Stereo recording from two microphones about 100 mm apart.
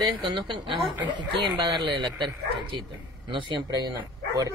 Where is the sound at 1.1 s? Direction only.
45° right (ahead or behind).